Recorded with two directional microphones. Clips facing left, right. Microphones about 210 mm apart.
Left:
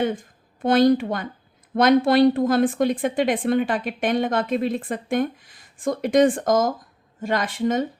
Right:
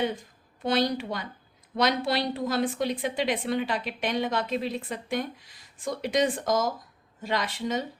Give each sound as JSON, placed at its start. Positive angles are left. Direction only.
{"t": 0.0, "sound": "a woman's voice", "side_deg": 50}